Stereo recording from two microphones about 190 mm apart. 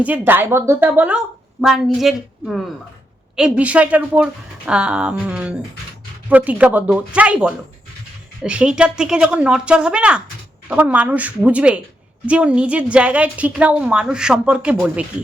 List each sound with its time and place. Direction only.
0.0 s a woman's voice: 10° right (ahead or behind)